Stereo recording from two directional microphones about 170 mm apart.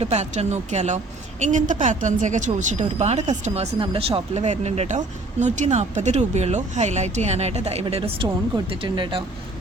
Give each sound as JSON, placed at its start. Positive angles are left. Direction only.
{"t": 0.0, "sound": "a woman's voice", "side_deg": -40}